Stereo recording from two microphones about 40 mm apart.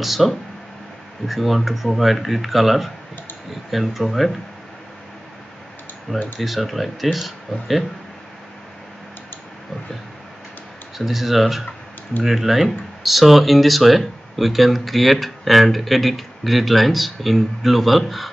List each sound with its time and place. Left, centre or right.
0.0 s speech: centre
6.1 s speech: centre
6.4 s speech: centre
11.0 s speech: centre